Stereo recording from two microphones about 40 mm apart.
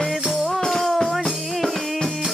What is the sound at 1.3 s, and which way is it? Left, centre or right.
Music, centre.